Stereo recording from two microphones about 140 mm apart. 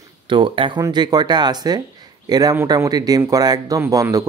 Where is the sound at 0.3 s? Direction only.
35° right (ahead or behind).